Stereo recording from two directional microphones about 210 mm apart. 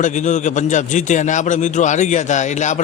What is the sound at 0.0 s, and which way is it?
Speech, 35° left (ahead or behind).